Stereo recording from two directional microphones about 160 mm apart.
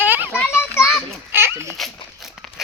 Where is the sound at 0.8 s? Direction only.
Centre (ahead or behind).